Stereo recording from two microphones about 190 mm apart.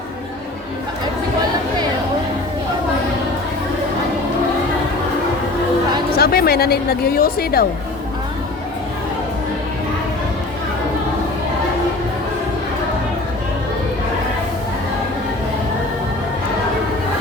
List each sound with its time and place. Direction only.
6.1 s speech: 55° left (ahead or behind)